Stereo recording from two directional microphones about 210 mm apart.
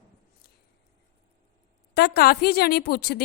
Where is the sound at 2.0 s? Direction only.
50° left (ahead or behind).